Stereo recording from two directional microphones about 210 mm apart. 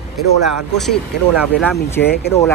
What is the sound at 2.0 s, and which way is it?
Speech, 50° left (ahead or behind).